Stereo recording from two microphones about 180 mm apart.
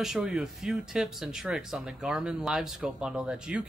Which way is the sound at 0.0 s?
5° right (ahead or behind).